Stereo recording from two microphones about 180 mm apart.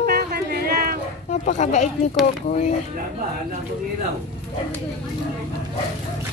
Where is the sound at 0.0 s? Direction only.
60° right (ahead or behind).